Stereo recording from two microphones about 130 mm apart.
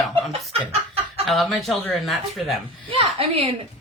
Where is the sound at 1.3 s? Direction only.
Centre (ahead or behind).